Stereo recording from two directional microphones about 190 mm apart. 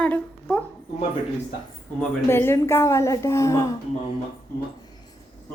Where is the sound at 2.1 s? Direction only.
10° left (ahead or behind).